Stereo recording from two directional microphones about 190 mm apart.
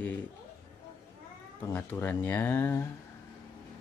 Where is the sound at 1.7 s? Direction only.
10° left (ahead or behind).